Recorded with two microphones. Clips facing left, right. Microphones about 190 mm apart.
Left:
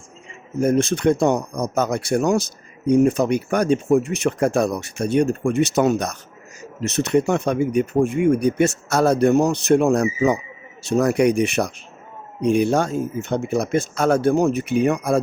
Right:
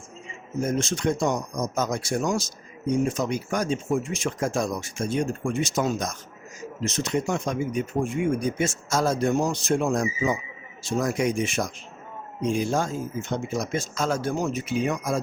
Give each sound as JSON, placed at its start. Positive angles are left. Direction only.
{"t": 0.6, "sound": "speech", "side_deg": 60}